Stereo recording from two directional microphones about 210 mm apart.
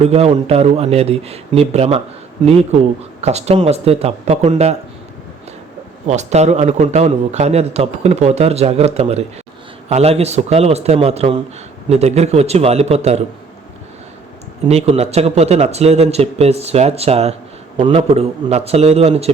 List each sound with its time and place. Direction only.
0.0 s a man's voice: 30° right (ahead or behind)
6.1 s a man's voice: 35° right (ahead or behind)
14.7 s a man's voice: 30° right (ahead or behind)